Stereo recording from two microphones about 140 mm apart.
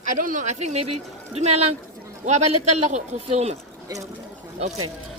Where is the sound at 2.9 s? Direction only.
50° right (ahead or behind).